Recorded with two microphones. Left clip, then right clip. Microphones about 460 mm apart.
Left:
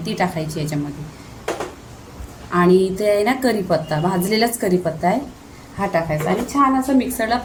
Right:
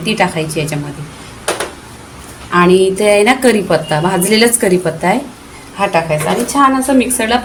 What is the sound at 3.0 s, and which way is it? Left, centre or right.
A woman's voice, left.